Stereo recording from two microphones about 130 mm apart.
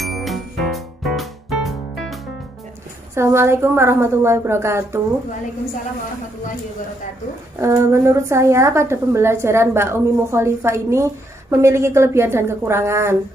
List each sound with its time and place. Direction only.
0.0 s music: centre (ahead or behind)
3.2 s a woman's voice: 20° right (ahead or behind)
7.6 s a woman's voice: 25° right (ahead or behind)